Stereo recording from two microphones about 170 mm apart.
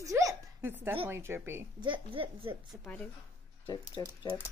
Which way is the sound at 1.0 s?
15° right (ahead or behind).